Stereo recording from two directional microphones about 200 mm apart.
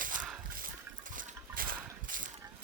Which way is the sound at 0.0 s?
40° right (ahead or behind).